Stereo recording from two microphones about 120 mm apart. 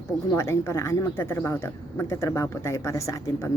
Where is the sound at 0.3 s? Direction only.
20° left (ahead or behind).